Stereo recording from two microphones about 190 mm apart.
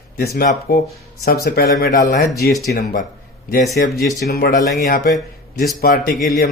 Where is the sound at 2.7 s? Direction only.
60° left (ahead or behind).